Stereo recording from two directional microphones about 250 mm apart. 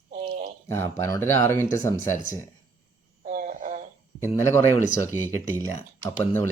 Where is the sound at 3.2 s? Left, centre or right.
Right.